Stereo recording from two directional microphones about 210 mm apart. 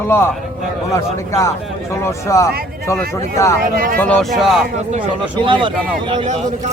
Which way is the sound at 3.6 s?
40° right (ahead or behind).